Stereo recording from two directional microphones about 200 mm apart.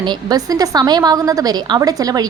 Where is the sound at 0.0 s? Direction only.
20° right (ahead or behind).